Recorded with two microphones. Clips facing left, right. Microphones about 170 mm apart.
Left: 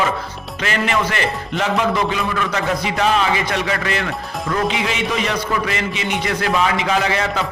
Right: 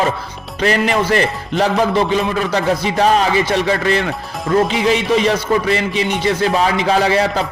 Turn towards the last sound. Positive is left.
turn(degrees=-35)  # may be behind; listen again after turning